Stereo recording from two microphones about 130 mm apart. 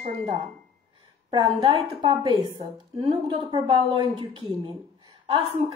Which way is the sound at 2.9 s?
50° right (ahead or behind).